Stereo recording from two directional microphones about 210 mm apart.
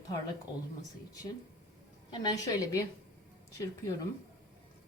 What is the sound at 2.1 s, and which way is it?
Speech, 20° left (ahead or behind).